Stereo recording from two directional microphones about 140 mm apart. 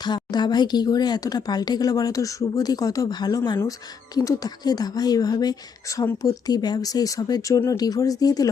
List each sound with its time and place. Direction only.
0.0 s speech: 30° left (ahead or behind)